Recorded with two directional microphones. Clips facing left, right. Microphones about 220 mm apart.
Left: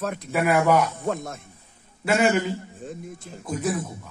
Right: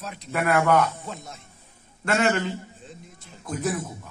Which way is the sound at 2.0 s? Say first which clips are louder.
Left 2 dB; 10° left (ahead or behind).